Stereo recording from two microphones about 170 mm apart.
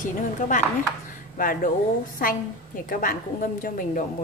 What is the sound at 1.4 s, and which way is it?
A woman's voice, 55° left (ahead or behind).